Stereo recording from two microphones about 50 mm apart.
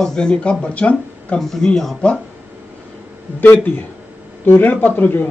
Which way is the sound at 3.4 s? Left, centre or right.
Left.